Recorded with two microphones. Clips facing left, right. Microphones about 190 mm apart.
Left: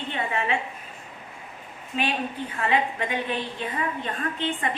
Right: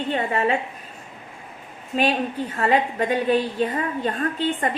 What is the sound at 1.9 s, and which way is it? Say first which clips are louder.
A woman's voice: right 6 dB; 35° right (ahead or behind).